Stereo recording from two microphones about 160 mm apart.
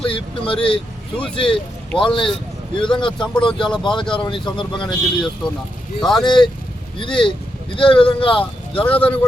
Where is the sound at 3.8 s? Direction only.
30° left (ahead or behind).